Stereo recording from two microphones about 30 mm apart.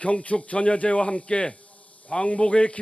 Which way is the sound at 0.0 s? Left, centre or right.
Left.